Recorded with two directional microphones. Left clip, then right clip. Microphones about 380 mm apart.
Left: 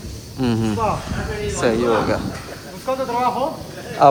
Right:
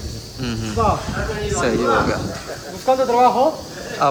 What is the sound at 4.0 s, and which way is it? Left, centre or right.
Speech, centre.